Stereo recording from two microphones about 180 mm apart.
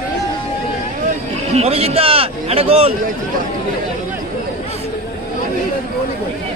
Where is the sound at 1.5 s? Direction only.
35° right (ahead or behind).